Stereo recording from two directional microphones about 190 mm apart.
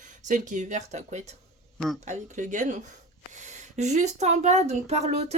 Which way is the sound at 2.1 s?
40° right (ahead or behind).